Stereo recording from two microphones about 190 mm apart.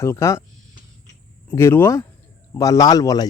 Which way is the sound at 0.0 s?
15° left (ahead or behind).